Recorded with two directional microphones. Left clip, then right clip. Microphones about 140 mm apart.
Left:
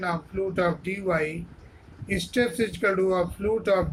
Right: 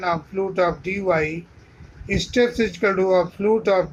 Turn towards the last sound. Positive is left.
turn(degrees=-60)  # may be behind; listen again after turning